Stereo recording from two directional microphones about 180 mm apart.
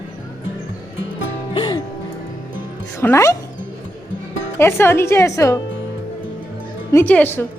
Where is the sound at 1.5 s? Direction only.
25° left (ahead or behind).